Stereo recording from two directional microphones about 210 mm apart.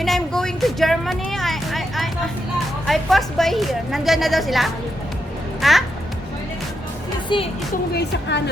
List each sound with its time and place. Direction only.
0.0 s a sound: centre (ahead or behind)
2.8 s a woman's voice: centre (ahead or behind)
7.9 s speech: 55° left (ahead or behind)